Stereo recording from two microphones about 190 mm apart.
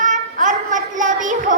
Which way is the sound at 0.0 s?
40° right (ahead or behind).